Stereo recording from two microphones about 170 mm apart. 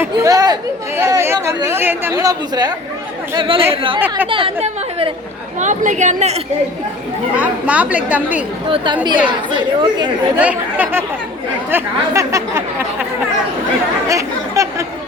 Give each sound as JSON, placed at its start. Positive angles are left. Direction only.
{"t": 0.0, "sound": "speech", "side_deg": -20}
{"t": 5.5, "sound": "a woman's voice", "side_deg": -45}
{"t": 7.3, "sound": "speech", "side_deg": -10}
{"t": 8.6, "sound": "speech", "side_deg": -30}
{"t": 10.3, "sound": "speech", "side_deg": -10}
{"t": 14.1, "sound": "chatter", "side_deg": -20}